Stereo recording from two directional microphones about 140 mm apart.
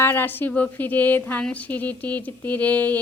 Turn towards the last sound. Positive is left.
turn(degrees=10)  # may be behind; listen again after turning